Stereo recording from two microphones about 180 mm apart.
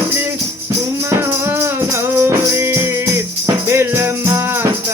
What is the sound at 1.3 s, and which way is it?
Music, 15° right (ahead or behind).